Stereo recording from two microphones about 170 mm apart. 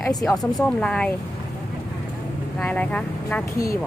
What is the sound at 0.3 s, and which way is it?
Speech, 5° left (ahead or behind).